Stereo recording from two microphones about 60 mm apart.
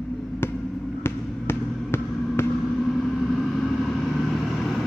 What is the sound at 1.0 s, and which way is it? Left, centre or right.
Basketball bounce, left.